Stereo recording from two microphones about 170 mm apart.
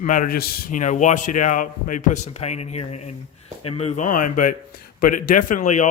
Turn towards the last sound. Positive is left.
turn(degrees=45)  # may be behind; listen again after turning